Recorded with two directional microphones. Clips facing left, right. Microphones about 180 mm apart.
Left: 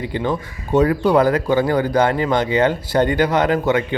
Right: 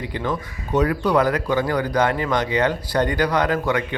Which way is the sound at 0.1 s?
30° left (ahead or behind).